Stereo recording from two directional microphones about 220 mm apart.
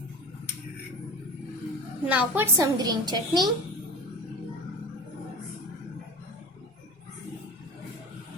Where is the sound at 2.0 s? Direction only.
10° right (ahead or behind).